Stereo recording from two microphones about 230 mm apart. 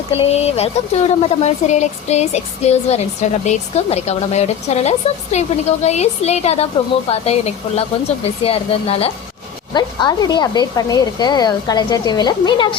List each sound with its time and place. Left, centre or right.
0.1 s speech: left